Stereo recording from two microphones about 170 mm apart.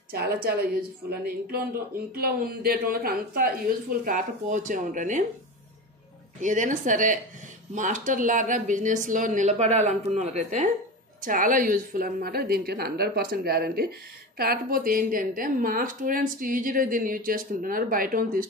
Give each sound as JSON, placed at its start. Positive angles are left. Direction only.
{"t": 0.1, "sound": "speech", "side_deg": -65}
{"t": 6.4, "sound": "speech", "side_deg": -50}
{"t": 11.2, "sound": "speech", "side_deg": -50}